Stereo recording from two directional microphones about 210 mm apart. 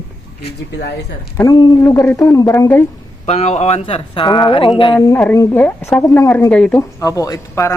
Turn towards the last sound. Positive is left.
turn(degrees=15)  # may be behind; listen again after turning